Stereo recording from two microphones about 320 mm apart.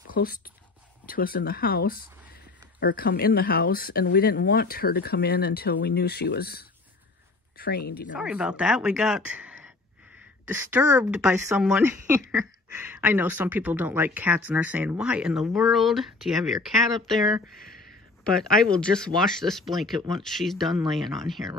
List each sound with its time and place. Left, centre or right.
0.1 s speech: left
8.1 s speech: centre
18.4 s speech: centre